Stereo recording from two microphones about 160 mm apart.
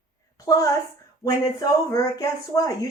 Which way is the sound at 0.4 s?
20° left (ahead or behind).